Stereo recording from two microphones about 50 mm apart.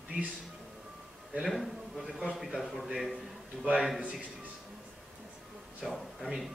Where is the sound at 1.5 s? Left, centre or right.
Centre.